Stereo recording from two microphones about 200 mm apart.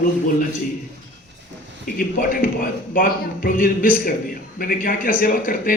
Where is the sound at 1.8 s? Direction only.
45° left (ahead or behind).